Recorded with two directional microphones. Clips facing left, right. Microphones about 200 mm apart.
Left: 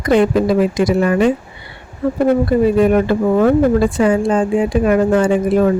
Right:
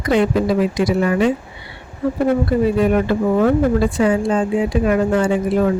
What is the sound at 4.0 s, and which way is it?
Speech, 50° left (ahead or behind).